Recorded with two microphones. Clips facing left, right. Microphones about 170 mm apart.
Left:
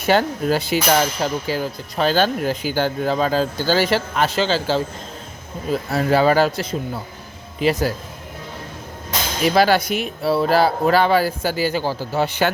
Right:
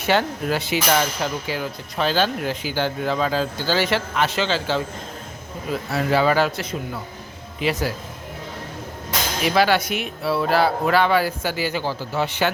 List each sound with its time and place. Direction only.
0.0 s speech: 40° left (ahead or behind)
5.9 s speech: 40° left (ahead or behind)
9.6 s speech: 40° left (ahead or behind)